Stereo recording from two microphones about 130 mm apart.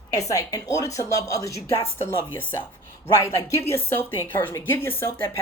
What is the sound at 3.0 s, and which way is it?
A woman's voice, 20° left (ahead or behind).